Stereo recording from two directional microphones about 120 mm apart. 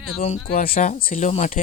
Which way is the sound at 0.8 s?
90° left.